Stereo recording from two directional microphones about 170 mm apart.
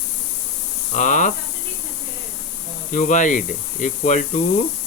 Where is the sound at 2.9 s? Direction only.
50° left (ahead or behind).